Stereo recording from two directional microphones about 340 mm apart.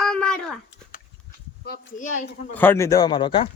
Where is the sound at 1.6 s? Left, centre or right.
Left.